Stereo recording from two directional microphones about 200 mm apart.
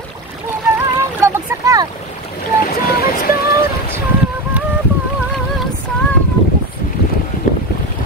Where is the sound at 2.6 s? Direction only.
50° left (ahead or behind).